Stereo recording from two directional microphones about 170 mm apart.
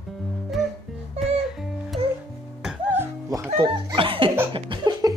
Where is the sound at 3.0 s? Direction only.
20° right (ahead or behind).